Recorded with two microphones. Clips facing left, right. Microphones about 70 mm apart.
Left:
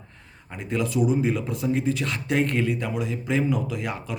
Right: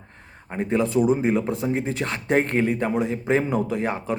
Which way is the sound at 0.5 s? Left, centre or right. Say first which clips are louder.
Right 5 dB; right.